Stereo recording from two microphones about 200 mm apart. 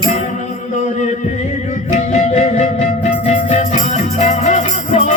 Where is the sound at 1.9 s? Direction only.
35° left (ahead or behind).